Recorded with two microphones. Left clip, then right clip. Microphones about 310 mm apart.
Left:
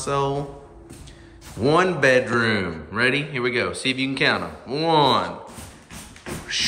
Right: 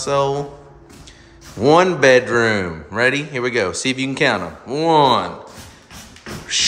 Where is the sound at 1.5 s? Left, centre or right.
Centre.